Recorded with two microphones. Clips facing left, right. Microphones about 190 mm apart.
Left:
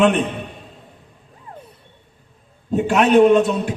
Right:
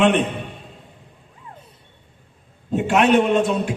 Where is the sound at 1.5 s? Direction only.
40° left (ahead or behind).